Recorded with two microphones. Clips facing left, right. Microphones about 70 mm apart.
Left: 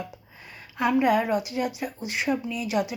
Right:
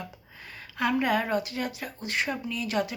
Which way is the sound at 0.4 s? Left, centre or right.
Centre.